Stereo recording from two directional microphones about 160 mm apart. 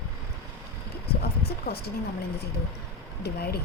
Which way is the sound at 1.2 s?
75° left (ahead or behind).